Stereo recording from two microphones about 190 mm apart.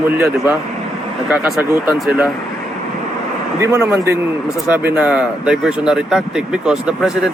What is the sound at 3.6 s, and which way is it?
Speech, 15° right (ahead or behind).